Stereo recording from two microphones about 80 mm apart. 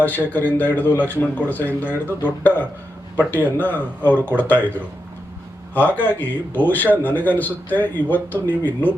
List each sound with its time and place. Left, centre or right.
0.0 s a man's voice: left